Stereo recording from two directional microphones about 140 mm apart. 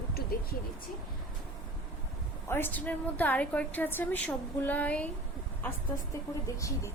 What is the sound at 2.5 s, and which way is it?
A woman's voice, 15° left (ahead or behind).